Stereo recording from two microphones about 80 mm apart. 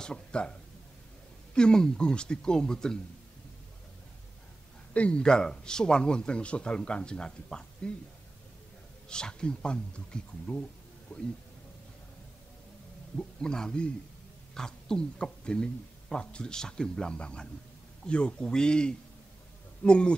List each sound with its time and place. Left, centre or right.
0.0 s a man's voice: centre
4.9 s a man's voice: centre
9.1 s a man's voice: centre
11.1 s speech: left
13.4 s a man's voice: centre